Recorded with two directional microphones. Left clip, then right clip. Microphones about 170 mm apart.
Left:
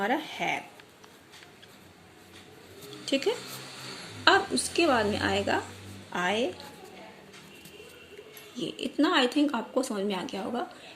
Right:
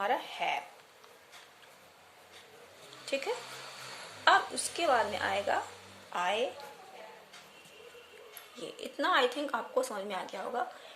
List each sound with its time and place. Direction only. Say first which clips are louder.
0.0 s speech: left 3 dB; 20° left (ahead or behind)
4.2 s a woman's voice: left 3 dB; 20° left (ahead or behind)
8.5 s speech: left 8 dB; 15° left (ahead or behind)